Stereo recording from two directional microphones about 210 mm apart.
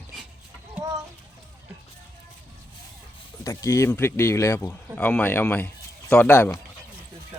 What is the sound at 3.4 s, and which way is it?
Speech, 15° left (ahead or behind).